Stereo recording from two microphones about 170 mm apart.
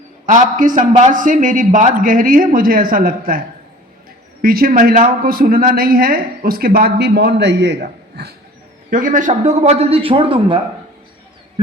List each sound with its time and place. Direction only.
0.3 s a man's voice: 50° right (ahead or behind)
4.4 s speech: 60° right (ahead or behind)
8.9 s a man's voice: 50° right (ahead or behind); by 10.6 s 30° right (ahead or behind)